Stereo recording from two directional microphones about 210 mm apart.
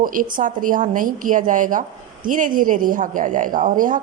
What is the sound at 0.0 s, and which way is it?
A woman's voice, 40° right (ahead or behind).